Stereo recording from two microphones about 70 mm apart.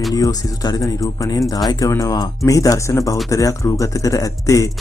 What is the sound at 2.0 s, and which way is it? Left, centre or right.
Speech, left.